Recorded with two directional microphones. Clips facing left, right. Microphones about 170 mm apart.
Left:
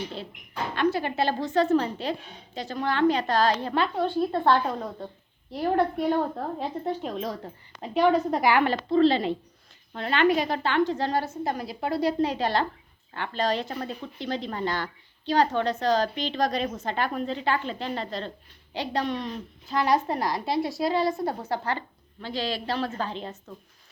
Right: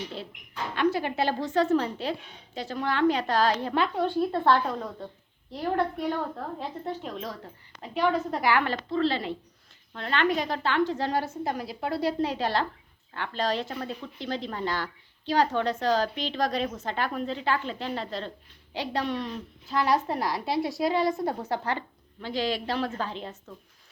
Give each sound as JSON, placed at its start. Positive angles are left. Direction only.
{"t": 0.9, "sound": "a woman's voice", "side_deg": -10}
{"t": 4.2, "sound": "a woman's voice", "side_deg": 15}
{"t": 5.5, "sound": "a woman's voice", "side_deg": 10}
{"t": 6.1, "sound": "a woman's voice", "side_deg": 30}
{"t": 6.6, "sound": "a woman's voice", "side_deg": 15}